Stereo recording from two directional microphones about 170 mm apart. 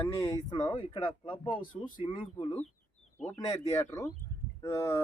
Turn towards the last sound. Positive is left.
turn(degrees=15)  # may be behind; listen again after turning